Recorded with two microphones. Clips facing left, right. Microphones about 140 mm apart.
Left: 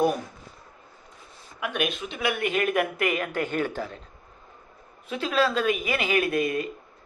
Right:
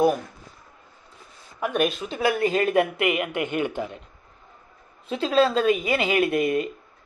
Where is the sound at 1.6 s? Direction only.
40° right (ahead or behind); by 4.0 s 20° right (ahead or behind).